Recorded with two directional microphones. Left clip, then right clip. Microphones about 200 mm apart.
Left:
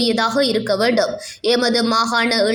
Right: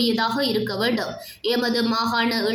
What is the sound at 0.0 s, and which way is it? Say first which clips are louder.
Speech: left 5 dB; 30° left (ahead or behind).